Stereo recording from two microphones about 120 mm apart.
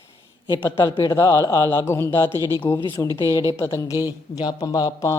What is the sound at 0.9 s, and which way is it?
Speech, 35° left (ahead or behind).